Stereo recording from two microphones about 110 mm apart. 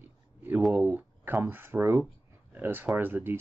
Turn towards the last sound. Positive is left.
turn(degrees=-20)  # may be behind; listen again after turning